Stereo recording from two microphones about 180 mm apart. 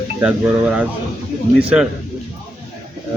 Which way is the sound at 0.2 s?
5° right (ahead or behind).